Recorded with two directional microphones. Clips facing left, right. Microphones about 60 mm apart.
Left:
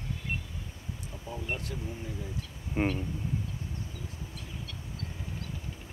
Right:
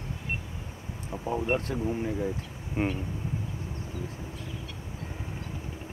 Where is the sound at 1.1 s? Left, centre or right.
Right.